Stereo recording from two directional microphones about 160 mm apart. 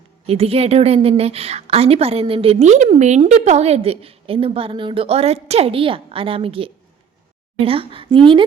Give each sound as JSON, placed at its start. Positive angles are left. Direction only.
{"t": 0.3, "sound": "a woman's voice", "side_deg": -40}